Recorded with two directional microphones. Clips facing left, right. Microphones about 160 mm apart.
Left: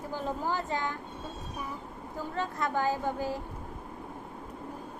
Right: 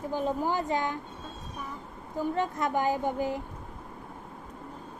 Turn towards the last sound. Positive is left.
turn(degrees=-15)  # may be behind; listen again after turning